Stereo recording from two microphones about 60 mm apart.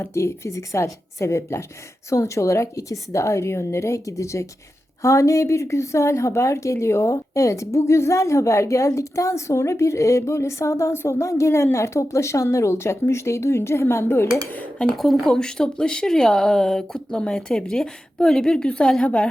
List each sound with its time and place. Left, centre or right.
0.0 s a woman's voice: left
14.8 s a woman's voice: centre
15.4 s speech: centre